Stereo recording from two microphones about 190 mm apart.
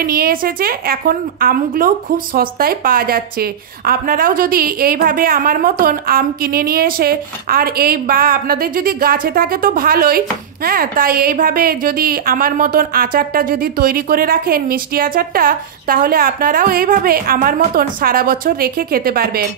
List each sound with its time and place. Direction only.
0.0 s a woman's voice: 50° right (ahead or behind)